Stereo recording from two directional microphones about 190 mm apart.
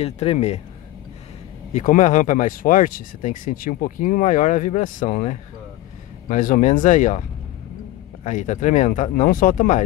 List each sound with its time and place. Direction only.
0.0 s speech: 35° left (ahead or behind)
1.7 s speech: 40° left (ahead or behind)